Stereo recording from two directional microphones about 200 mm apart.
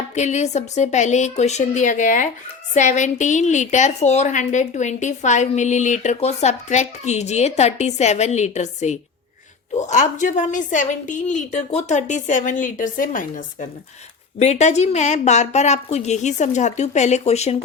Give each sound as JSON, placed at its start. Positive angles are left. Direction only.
{"t": 0.1, "sound": "a woman's voice", "side_deg": 35}